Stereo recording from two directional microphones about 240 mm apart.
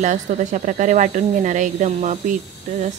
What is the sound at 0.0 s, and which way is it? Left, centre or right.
Speech, right.